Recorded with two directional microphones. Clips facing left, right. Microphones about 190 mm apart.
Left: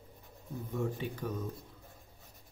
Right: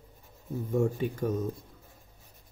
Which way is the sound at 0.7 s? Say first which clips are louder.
Right 8 dB; 45° right (ahead or behind).